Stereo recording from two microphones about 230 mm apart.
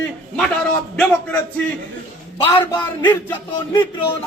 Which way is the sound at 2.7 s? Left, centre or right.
Centre.